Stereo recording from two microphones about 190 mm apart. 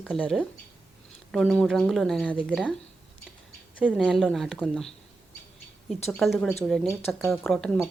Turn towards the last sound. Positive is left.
turn(degrees=5)  # may be behind; listen again after turning